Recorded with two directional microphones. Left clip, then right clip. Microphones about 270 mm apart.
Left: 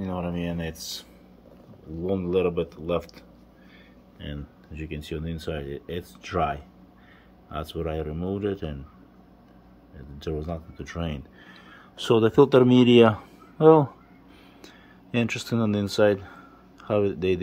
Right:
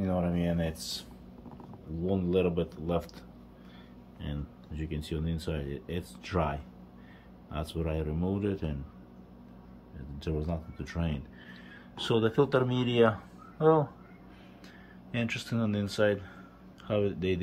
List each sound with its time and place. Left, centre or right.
0.0 s speech: centre
2.0 s speech: centre
4.2 s speech: centre
10.1 s speech: centre
12.0 s speech: left
15.0 s speech: left